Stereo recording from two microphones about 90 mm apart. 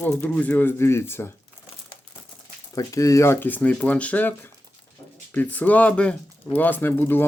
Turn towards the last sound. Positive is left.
turn(degrees=25)  # may be behind; listen again after turning